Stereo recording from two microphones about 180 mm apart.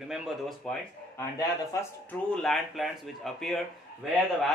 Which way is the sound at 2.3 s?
Centre (ahead or behind).